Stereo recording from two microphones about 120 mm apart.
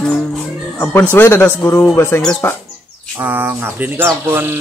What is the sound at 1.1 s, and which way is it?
Speech, 20° left (ahead or behind).